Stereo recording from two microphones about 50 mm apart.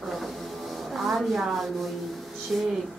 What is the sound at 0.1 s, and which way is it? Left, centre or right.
Rub, centre.